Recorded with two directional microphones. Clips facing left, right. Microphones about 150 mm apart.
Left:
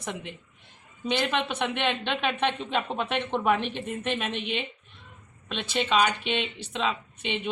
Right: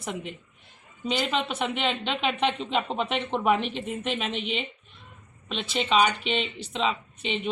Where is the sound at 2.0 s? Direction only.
15° right (ahead or behind).